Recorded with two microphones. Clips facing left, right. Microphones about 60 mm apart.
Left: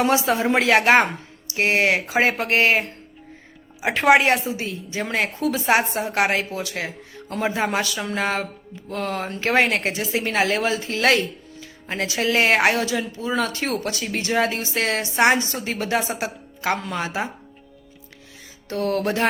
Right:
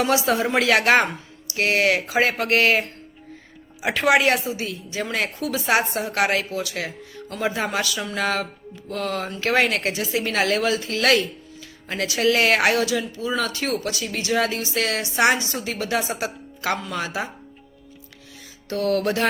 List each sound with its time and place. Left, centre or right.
0.0 s a woman's voice: left
12.8 s a woman's voice: left
18.7 s a woman's voice: left